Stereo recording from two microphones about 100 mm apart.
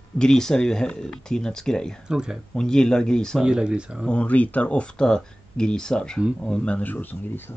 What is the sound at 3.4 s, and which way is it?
Speech, 10° right (ahead or behind).